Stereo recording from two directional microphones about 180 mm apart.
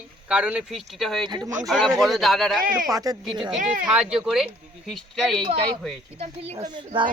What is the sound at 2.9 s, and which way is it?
Speech, 20° right (ahead or behind).